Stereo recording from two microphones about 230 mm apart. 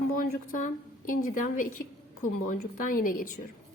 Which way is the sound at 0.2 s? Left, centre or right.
Left.